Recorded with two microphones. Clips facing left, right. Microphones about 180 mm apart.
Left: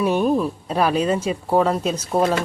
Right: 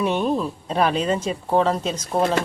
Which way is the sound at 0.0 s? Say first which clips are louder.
Left 3 dB; 10° left (ahead or behind).